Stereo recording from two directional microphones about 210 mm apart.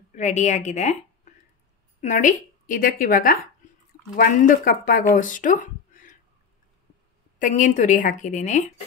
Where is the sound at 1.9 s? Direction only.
35° left (ahead or behind).